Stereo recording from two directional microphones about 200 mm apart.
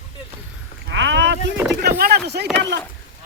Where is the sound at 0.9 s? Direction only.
65° right (ahead or behind).